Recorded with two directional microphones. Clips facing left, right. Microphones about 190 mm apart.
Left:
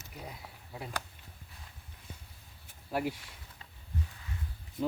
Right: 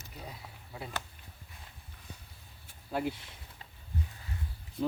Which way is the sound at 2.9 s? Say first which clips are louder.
Even; 10° left (ahead or behind).